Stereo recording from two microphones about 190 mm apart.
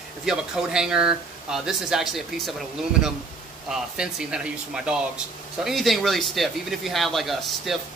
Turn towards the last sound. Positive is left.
turn(degrees=0)  # may be behind; listen again after turning